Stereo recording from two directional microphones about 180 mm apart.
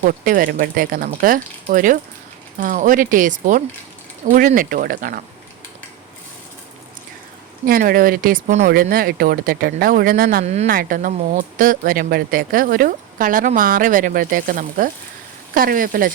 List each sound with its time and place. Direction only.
0.0 s speech: 50° right (ahead or behind)
7.6 s speech: 50° right (ahead or behind)
10.4 s speech: 40° right (ahead or behind)
10.7 s speech: 50° right (ahead or behind)